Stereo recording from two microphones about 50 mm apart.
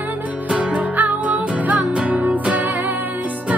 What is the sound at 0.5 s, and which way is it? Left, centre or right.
Music, right.